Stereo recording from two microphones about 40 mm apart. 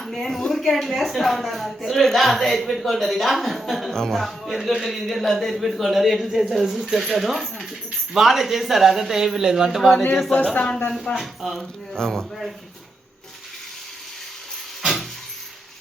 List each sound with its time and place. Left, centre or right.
0.0 s a woman's voice: centre
10.6 s speech: left
11.2 s a woman's voice: centre
11.9 s speech: centre
14.8 s a sound: centre